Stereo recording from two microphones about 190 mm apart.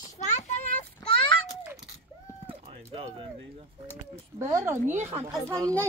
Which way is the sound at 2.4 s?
30° right (ahead or behind).